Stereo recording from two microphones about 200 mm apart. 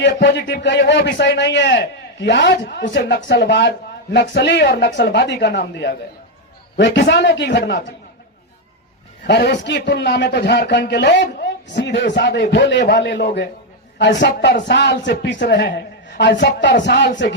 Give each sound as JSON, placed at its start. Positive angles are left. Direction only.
{"t": 0.0, "sound": "a man's voice", "side_deg": 60}
{"t": 9.2, "sound": "a man's voice", "side_deg": 55}